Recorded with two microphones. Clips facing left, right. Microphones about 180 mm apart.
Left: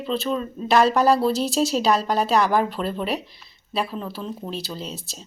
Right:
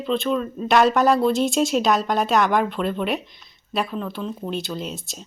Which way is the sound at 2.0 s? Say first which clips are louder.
Even; centre (ahead or behind).